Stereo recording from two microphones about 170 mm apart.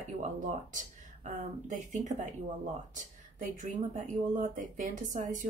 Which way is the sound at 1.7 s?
45° right (ahead or behind).